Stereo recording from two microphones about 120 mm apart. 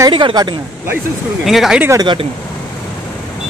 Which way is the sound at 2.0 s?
40° right (ahead or behind).